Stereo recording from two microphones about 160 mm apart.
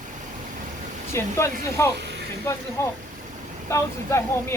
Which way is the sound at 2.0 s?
90° right.